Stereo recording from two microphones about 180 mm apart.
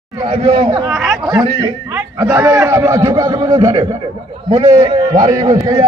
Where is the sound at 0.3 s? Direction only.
25° right (ahead or behind).